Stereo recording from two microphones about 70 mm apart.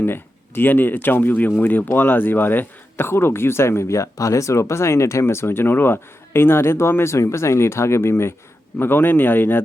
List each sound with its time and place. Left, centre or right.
0.0 s speech: left